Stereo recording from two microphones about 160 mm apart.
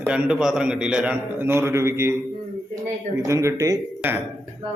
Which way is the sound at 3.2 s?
20° right (ahead or behind).